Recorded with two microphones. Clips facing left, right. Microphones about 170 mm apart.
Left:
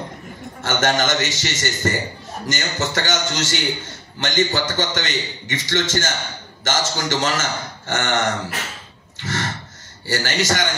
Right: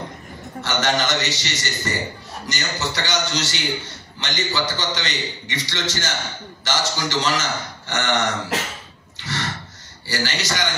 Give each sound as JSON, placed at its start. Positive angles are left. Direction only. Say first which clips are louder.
{"t": 0.6, "sound": "a man's voice", "louder": "left 2 dB", "side_deg": 50}
{"t": 9.2, "sound": "a sound", "louder": "left 3 dB", "side_deg": 45}
{"t": 10.0, "sound": "a man's voice", "louder": "left 4 dB", "side_deg": 45}